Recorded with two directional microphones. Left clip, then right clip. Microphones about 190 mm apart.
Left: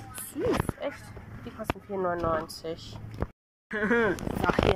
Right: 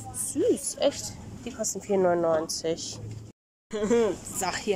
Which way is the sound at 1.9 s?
40° right (ahead or behind).